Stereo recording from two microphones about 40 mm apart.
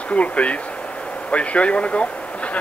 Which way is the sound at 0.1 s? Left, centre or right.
Left.